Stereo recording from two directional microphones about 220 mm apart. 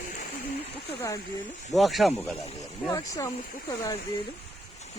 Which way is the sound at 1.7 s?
Centre (ahead or behind).